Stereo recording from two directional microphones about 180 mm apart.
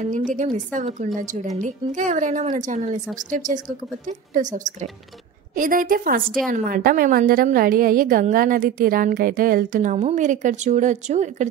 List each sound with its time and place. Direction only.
0.7 s a woman's voice: 45° right (ahead or behind)